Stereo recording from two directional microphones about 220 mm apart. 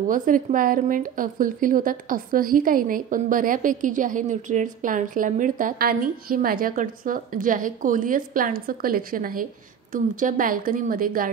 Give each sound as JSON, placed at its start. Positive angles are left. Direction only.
{"t": 0.1, "sound": "a woman's voice", "side_deg": -35}